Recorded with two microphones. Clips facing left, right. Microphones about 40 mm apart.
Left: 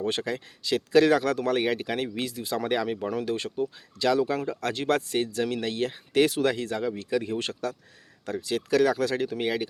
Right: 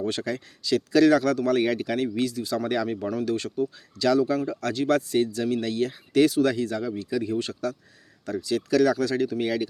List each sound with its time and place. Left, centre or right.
0.0 s speech: left